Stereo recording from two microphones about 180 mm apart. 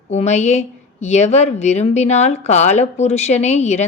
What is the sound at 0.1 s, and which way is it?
A woman's voice, 40° left (ahead or behind).